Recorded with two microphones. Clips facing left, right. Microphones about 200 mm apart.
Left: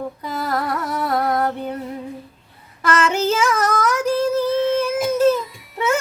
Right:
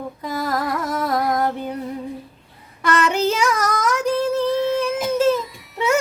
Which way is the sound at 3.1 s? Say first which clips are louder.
Even; centre (ahead or behind).